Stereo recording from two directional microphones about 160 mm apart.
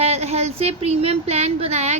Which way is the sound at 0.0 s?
40° right (ahead or behind).